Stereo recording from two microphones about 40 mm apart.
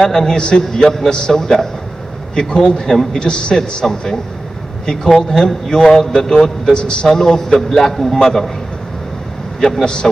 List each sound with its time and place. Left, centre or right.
0.0 s a man's voice: centre
0.4 s a man's voice: left
2.9 s a man's voice: centre
3.2 s a man's voice: left
6.7 s a man's voice: left
9.6 s a man's voice: centre